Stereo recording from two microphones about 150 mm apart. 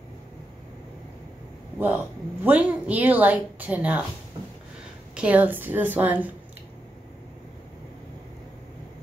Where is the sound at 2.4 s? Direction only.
10° right (ahead or behind).